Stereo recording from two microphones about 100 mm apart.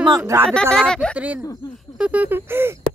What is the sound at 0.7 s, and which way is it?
Speech, 5° left (ahead or behind).